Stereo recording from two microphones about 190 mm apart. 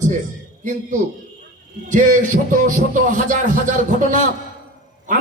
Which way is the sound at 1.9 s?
45° right (ahead or behind).